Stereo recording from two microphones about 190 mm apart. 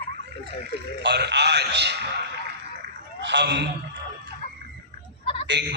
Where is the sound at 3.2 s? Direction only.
70° right (ahead or behind).